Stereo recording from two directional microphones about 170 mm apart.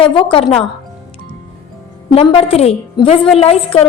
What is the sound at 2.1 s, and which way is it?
A woman's voice, 30° left (ahead or behind).